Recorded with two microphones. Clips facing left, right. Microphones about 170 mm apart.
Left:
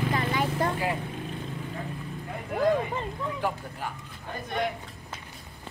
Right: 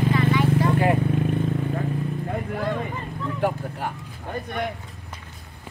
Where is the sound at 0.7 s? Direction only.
60° right (ahead or behind).